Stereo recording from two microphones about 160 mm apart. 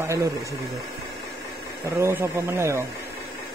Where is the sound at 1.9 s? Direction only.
15° right (ahead or behind).